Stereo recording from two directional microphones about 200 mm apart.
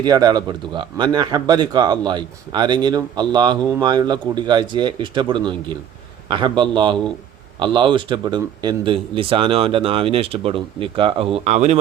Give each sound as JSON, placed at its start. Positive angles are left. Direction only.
{"t": 0.0, "sound": "speech", "side_deg": -20}